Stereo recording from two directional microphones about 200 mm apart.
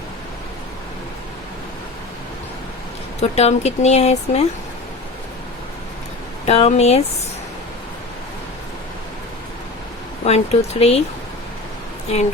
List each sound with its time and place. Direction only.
3.2 s speech: 35° left (ahead or behind)
6.4 s speech: 30° left (ahead or behind)
10.2 s speech: 30° left (ahead or behind)